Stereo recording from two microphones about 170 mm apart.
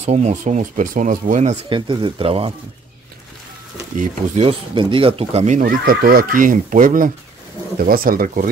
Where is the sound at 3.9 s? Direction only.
50° right (ahead or behind).